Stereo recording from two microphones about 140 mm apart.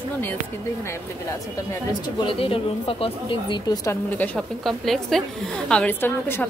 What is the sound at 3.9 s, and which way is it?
A woman's voice, 10° left (ahead or behind).